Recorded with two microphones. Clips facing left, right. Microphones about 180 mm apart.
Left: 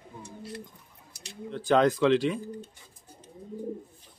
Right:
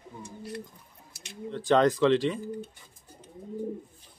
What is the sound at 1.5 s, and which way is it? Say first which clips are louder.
Speech: even; centre (ahead or behind).